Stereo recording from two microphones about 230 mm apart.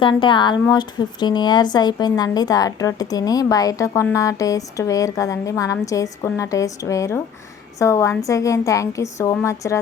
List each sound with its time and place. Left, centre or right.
0.0 s speech: left